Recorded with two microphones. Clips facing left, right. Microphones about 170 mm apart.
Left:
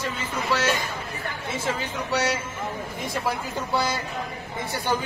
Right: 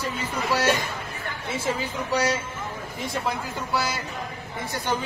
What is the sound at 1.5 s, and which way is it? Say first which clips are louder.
Speech: right 2 dB; 10° right (ahead or behind).